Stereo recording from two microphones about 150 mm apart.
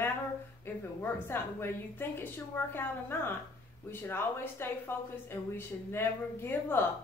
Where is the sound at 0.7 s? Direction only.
15° left (ahead or behind).